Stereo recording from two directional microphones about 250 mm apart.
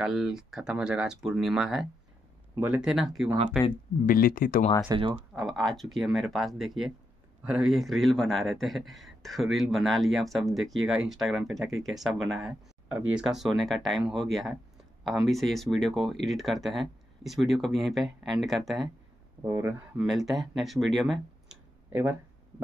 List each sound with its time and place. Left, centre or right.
0.0 s speech: centre
4.0 s speech: left
4.8 s speech: centre
5.3 s speech: centre
19.4 s speech: centre